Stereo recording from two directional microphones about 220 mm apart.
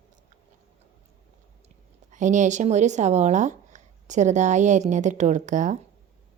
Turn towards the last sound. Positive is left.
turn(degrees=-35)  # may be behind; listen again after turning